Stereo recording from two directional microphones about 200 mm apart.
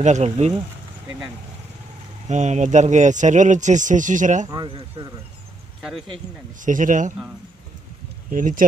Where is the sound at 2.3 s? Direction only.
35° right (ahead or behind).